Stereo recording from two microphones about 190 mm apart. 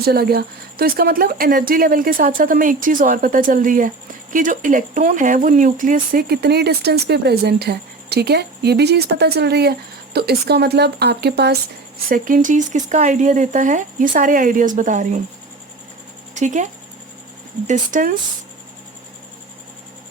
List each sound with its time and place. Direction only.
0.0 s a woman's voice: 55° right (ahead or behind)
12.0 s speech: 45° right (ahead or behind)
16.3 s speech: 40° right (ahead or behind)
17.7 s a woman's voice: 45° right (ahead or behind)